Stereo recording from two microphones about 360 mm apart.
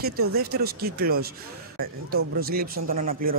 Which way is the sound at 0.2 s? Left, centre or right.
Right.